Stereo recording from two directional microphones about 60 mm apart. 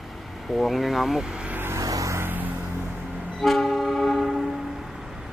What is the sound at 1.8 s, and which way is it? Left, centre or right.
Vehicle, right.